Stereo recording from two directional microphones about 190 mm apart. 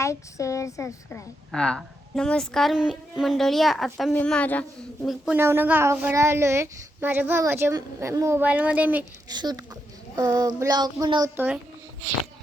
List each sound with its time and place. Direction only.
0.0 s speech: 15° left (ahead or behind)
1.5 s a woman's voice: 5° left (ahead or behind)
5.0 s speech: 5° right (ahead or behind)
9.3 s child singing: 20° right (ahead or behind)
11.3 s speech: 5° right (ahead or behind)